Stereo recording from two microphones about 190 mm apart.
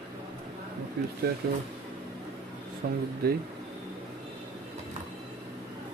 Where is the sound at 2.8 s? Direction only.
55° right (ahead or behind).